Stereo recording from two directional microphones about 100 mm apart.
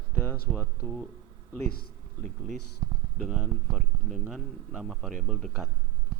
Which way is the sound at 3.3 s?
10° right (ahead or behind).